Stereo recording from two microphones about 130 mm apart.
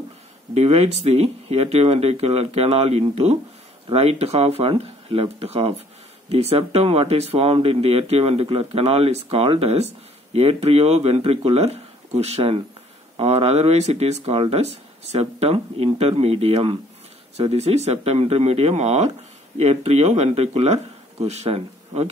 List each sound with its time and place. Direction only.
0.6 s speech: 55° right (ahead or behind)